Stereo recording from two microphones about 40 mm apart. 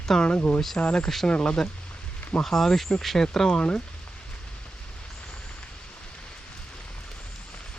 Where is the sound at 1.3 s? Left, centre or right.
Left.